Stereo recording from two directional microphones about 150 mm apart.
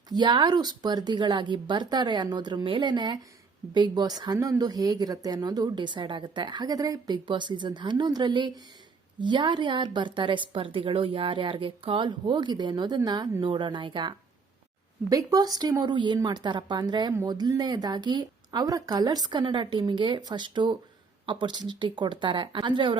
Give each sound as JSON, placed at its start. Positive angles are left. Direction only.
{"t": 0.1, "sound": "a woman's voice", "side_deg": -30}